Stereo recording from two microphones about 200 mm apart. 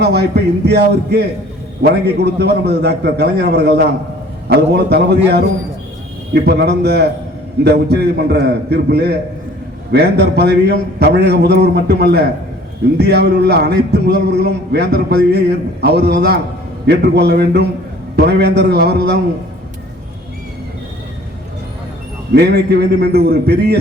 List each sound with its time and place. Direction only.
0.0 s a man's voice: 55° right (ahead or behind)
22.4 s a man's voice: 55° right (ahead or behind)